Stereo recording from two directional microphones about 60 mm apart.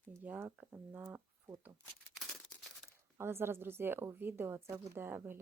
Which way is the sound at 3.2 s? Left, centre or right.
Right.